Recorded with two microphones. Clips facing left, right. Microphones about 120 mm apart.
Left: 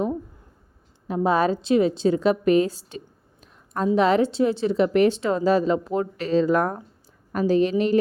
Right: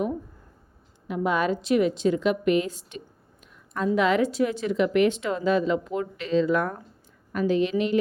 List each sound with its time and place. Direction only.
1.0 s a woman's voice: 35° left (ahead or behind)
3.4 s a sound: 35° left (ahead or behind)
3.9 s a woman's voice: 35° left (ahead or behind)